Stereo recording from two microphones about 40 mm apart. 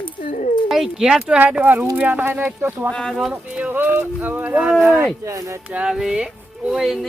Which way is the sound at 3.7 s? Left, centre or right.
Right.